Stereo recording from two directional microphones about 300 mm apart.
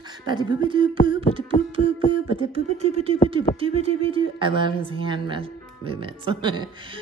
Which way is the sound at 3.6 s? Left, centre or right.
Centre.